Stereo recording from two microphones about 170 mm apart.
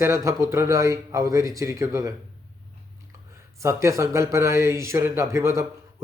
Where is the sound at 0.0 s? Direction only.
15° right (ahead or behind).